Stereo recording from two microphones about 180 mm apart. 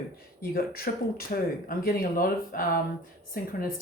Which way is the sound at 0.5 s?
55° left (ahead or behind).